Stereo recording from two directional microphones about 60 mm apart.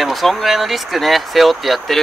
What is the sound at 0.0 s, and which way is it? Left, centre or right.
Speech, centre.